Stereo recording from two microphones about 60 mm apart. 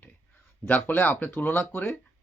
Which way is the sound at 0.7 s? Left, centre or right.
Left.